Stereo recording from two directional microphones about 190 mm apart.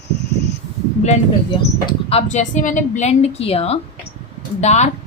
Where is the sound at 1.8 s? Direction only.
30° left (ahead or behind).